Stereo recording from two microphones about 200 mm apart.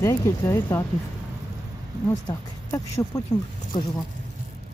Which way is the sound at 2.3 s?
20° left (ahead or behind).